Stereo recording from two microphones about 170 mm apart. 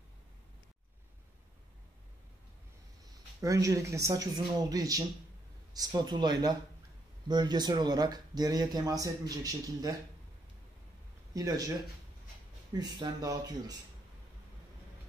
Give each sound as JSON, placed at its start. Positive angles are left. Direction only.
{"t": 3.3, "sound": "speech", "side_deg": -20}
{"t": 11.3, "sound": "speech", "side_deg": -20}
{"t": 12.7, "sound": "speech", "side_deg": -20}